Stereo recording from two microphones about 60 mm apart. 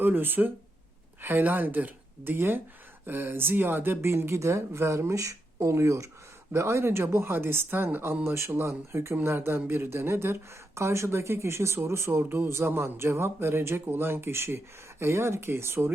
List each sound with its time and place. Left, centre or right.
0.0 s speech: right
4.1 s speech: right